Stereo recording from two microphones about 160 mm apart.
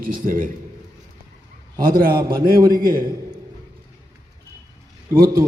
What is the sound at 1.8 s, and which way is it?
A man's voice, 65° right (ahead or behind).